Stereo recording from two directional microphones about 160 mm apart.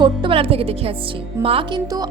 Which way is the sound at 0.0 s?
35° right (ahead or behind).